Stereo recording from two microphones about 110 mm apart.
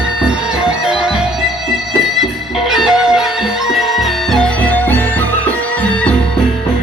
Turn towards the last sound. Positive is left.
turn(degrees=15)  # may be behind; listen again after turning